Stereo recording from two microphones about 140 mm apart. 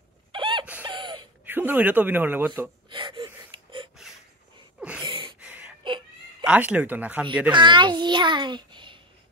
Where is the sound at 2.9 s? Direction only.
35° right (ahead or behind).